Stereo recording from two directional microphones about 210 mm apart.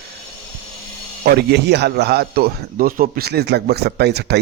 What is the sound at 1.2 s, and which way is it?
A man's voice, 50° right (ahead or behind).